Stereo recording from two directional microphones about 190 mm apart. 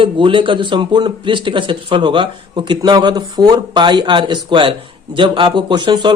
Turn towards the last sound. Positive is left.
turn(degrees=-25)  # may be behind; listen again after turning